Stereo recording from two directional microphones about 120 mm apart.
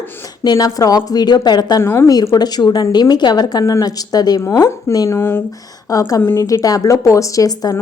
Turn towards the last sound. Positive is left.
turn(degrees=30)  # may be behind; listen again after turning